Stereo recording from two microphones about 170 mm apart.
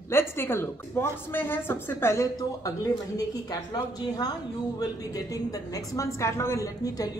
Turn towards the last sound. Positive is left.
turn(degrees=20)  # may be behind; listen again after turning